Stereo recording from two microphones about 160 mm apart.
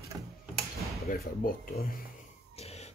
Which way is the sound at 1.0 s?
65° left (ahead or behind).